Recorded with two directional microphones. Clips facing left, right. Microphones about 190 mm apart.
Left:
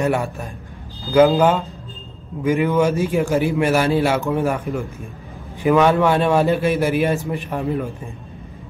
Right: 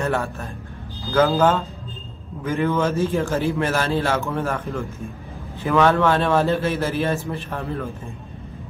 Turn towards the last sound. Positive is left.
turn(degrees=15)  # may be behind; listen again after turning